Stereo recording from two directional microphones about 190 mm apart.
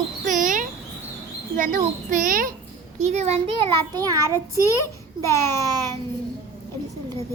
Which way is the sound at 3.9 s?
20° right (ahead or behind).